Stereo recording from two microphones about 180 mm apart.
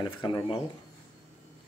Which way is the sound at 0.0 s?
25° left (ahead or behind).